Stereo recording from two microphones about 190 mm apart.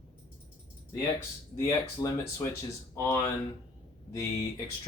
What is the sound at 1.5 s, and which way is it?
Speech, 15° left (ahead or behind).